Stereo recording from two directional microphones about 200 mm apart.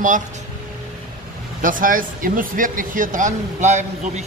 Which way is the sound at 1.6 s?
40° right (ahead or behind).